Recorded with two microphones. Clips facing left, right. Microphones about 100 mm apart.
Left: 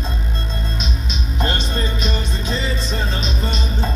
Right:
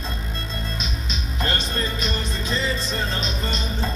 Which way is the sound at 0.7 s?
20° left (ahead or behind).